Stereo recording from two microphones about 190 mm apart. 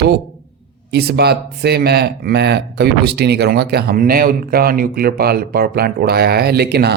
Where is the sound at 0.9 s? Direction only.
60° right (ahead or behind).